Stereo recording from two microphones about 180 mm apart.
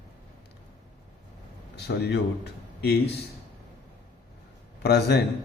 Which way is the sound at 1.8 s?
70° left (ahead or behind).